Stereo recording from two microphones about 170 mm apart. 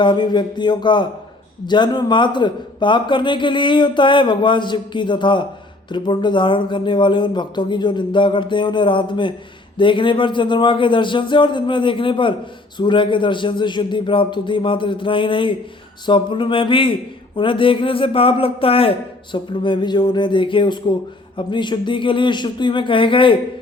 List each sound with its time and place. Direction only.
0.0 s a man's voice: 25° left (ahead or behind)